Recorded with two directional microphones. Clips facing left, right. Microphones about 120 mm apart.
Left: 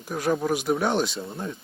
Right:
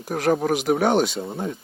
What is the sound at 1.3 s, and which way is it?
Speech, 90° right.